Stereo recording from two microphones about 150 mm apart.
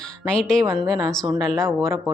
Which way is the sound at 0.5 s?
20° right (ahead or behind).